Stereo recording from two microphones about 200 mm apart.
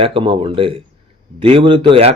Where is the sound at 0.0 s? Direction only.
25° right (ahead or behind).